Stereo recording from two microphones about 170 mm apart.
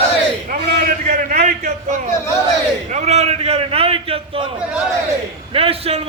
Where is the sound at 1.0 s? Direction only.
60° right (ahead or behind).